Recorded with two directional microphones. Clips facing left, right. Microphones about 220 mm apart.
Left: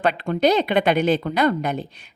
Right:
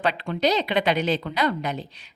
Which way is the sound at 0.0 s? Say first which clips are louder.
Left 4 dB; 50° left (ahead or behind).